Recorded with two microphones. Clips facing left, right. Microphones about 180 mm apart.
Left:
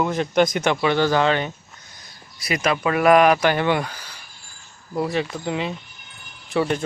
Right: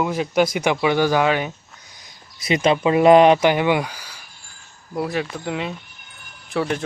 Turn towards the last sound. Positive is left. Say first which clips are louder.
# left 1 dB
turn(degrees=0)  # may be behind; listen again after turning